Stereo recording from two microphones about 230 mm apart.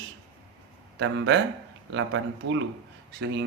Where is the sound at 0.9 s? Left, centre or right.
Right.